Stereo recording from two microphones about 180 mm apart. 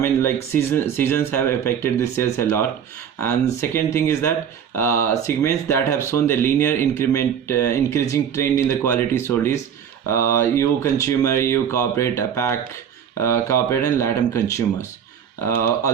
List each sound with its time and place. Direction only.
0.0 s speech: 10° left (ahead or behind)
3.9 s speech: 15° left (ahead or behind)